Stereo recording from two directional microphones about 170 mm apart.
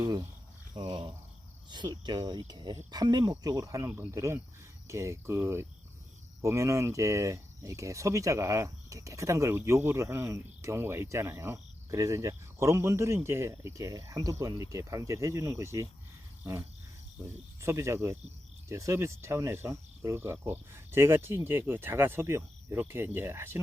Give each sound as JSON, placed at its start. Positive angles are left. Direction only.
{"t": 0.8, "sound": "speech", "side_deg": -25}
{"t": 16.4, "sound": "a sound", "side_deg": -15}
{"t": 17.2, "sound": "speech", "side_deg": -15}